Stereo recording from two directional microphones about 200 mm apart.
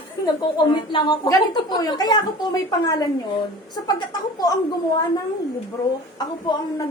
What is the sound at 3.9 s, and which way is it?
Speech, 20° left (ahead or behind).